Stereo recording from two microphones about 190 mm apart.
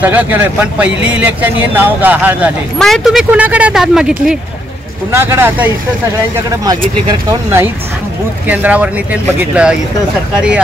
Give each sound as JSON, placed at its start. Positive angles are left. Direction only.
{"t": 0.0, "sound": "a man's voice", "side_deg": -10}
{"t": 8.5, "sound": "a man's voice", "side_deg": -10}